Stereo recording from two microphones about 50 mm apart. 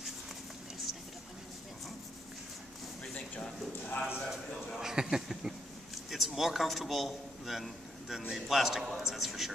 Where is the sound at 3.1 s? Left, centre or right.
Left.